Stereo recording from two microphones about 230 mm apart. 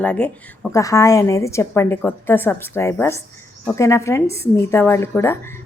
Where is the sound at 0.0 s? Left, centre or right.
Centre.